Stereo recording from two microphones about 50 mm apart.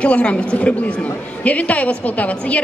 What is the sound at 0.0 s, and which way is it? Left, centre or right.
A woman's voice, left.